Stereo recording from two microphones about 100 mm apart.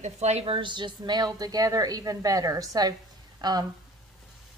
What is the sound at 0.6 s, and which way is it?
A woman's voice, 50° right (ahead or behind).